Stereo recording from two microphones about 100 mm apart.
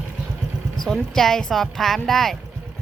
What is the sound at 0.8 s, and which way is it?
Speech, 5° left (ahead or behind).